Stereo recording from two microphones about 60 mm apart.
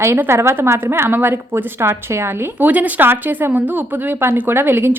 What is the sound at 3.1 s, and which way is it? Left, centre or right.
Speech, right.